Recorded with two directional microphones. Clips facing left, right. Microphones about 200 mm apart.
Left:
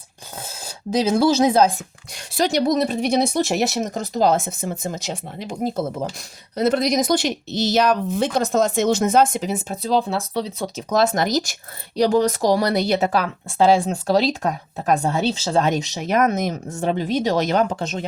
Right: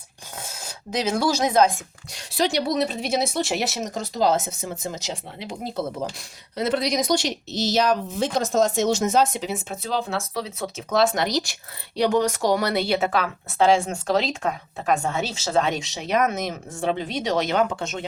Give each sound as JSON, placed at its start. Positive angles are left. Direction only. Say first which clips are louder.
{"t": 0.6, "sound": "speech", "louder": "left 5 dB", "side_deg": 30}
{"t": 2.1, "sound": "speech", "louder": "left 3 dB", "side_deg": 45}
{"t": 11.9, "sound": "speech", "louder": "left 3 dB", "side_deg": 35}